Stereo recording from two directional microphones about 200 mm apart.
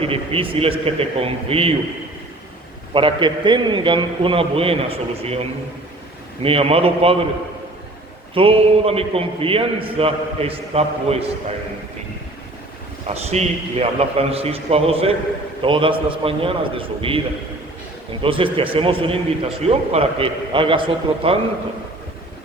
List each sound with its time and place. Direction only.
0.0 s a man's voice: 30° right (ahead or behind)
2.9 s a man's voice: 25° right (ahead or behind)
8.4 s a man's voice: 30° right (ahead or behind)
13.1 s a man's voice: 35° right (ahead or behind)
18.2 s a man's voice: 25° right (ahead or behind)